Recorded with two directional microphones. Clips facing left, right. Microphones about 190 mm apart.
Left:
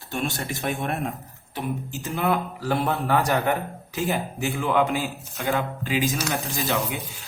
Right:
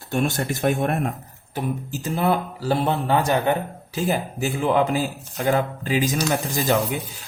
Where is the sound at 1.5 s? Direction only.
35° right (ahead or behind); by 3.6 s 20° right (ahead or behind).